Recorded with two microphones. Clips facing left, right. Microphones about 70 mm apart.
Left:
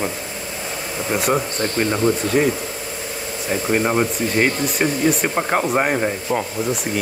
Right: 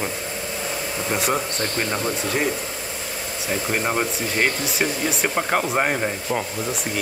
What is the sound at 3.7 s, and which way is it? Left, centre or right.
Speech, centre.